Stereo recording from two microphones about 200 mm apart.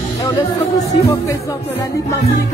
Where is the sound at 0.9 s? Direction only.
15° left (ahead or behind).